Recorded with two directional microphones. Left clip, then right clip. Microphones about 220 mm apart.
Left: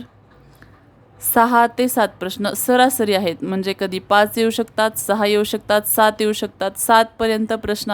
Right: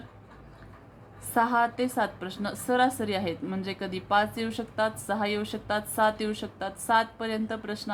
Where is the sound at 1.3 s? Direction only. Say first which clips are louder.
Left 10 dB; 55° left (ahead or behind).